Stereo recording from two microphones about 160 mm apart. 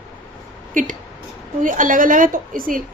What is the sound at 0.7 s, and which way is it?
A woman's voice, 55° right (ahead or behind).